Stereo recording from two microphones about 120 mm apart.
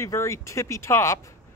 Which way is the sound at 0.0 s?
25° left (ahead or behind).